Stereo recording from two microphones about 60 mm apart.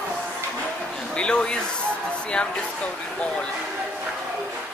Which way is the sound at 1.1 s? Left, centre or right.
Centre.